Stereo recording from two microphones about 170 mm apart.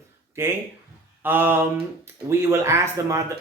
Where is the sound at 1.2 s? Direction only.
10° right (ahead or behind).